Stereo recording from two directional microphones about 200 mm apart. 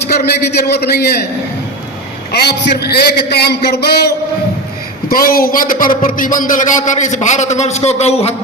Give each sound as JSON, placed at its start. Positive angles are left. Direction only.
{"t": 0.3, "sound": "a woman's voice", "side_deg": 55}
{"t": 2.3, "sound": "a man's voice", "side_deg": 55}